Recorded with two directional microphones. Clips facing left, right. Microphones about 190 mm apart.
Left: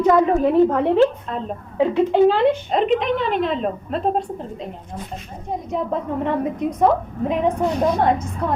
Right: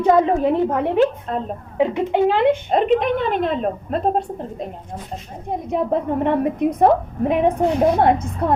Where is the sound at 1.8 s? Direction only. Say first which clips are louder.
Left 2 dB; 15° right (ahead or behind).